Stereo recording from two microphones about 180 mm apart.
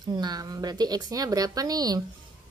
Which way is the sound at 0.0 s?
20° right (ahead or behind).